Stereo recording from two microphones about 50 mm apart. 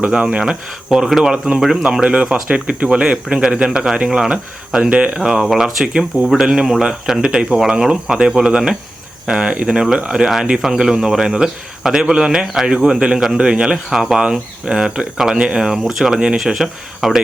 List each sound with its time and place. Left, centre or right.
0.1 s a man's voice: centre
1.6 s a man's voice: centre
2.0 s a man's voice: right
4.9 s speech: right; by 5.8 s centre
5.8 s a man's voice: centre
6.2 s a man's voice: centre
9.7 s a man's voice: centre